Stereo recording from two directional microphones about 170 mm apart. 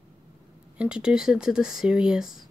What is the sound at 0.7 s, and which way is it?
Speech, 5° right (ahead or behind).